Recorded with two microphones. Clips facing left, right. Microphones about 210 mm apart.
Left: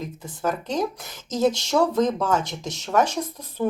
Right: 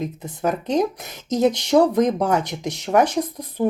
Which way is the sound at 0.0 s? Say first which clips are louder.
Right 4 dB; 20° right (ahead or behind).